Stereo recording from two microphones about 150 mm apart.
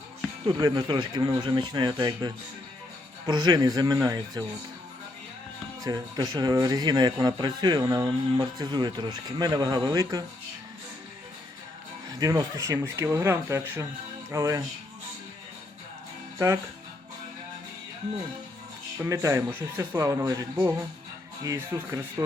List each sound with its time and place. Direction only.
0.4 s speech: 25° right (ahead or behind)
5.8 s speech: 25° right (ahead or behind)
12.2 s speech: 25° right (ahead or behind)
19.0 s speech: 20° right (ahead or behind)